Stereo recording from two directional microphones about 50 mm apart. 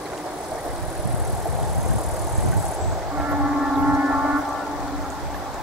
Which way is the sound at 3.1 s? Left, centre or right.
Right.